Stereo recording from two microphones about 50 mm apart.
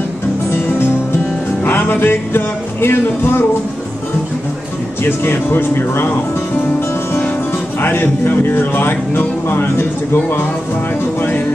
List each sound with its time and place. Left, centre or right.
0.5 s music: left
5.0 s music: left
7.8 s music: left